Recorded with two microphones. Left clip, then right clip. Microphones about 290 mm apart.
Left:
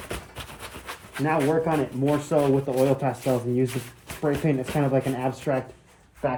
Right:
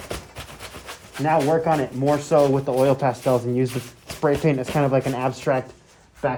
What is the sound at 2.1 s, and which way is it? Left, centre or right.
Speech, right.